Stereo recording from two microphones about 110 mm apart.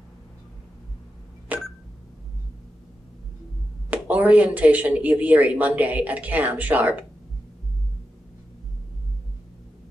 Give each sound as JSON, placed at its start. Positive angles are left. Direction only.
{"t": 1.5, "sound": "telephone dialing", "side_deg": -15}
{"t": 3.9, "sound": "speech", "side_deg": -15}